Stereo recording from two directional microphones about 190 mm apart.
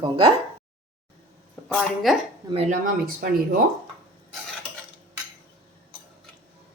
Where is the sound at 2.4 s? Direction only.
35° right (ahead or behind).